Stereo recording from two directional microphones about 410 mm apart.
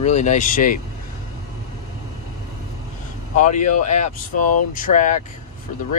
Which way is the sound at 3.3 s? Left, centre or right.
Centre.